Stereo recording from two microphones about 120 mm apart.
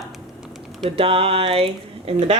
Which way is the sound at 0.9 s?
50° right (ahead or behind).